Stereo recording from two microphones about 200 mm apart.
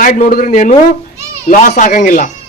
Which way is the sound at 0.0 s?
45° left (ahead or behind).